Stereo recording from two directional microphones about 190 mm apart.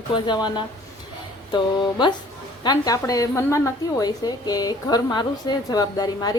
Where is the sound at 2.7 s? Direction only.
20° left (ahead or behind).